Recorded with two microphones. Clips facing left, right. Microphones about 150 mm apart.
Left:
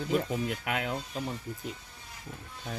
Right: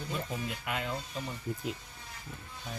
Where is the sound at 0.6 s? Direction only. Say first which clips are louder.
Left 3 dB; 60° left (ahead or behind).